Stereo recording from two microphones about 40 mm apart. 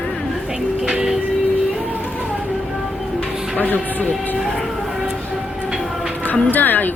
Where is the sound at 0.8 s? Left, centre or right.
Right.